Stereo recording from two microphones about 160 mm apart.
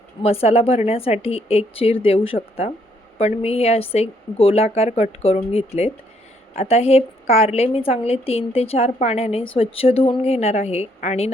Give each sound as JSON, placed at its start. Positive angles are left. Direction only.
{"t": 0.2, "sound": "a woman's voice", "side_deg": 40}